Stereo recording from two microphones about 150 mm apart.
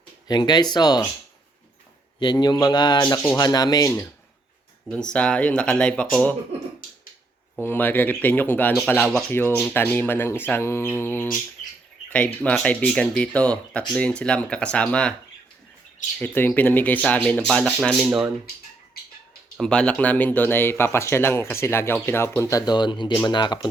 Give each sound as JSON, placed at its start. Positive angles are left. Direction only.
{"t": 0.3, "sound": "speech", "side_deg": 30}
{"t": 2.1, "sound": "speech", "side_deg": 30}
{"t": 4.9, "sound": "speech", "side_deg": 5}
{"t": 7.6, "sound": "speech", "side_deg": 15}
{"t": 16.2, "sound": "speech", "side_deg": 10}
{"t": 19.5, "sound": "speech", "side_deg": 5}